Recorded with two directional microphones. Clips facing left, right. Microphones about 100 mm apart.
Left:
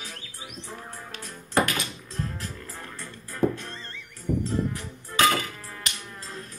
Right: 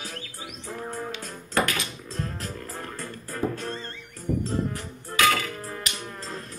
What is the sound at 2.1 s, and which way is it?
Music, 40° right (ahead or behind).